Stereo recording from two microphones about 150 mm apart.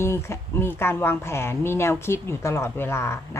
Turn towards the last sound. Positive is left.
turn(degrees=15)  # may be behind; listen again after turning